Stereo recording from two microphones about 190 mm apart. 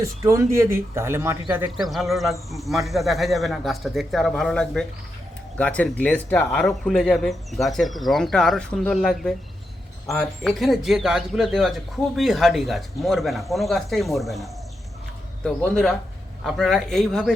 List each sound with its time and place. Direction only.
0.0 s speech: 15° right (ahead or behind)
1.7 s speech: centre (ahead or behind)